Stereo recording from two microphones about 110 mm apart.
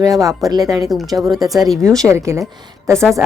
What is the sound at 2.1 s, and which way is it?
Speech, 30° right (ahead or behind).